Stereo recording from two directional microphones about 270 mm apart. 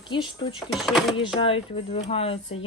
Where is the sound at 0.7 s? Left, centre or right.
Centre.